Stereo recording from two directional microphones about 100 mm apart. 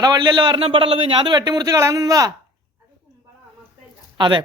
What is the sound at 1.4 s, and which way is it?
Speech, 40° right (ahead or behind).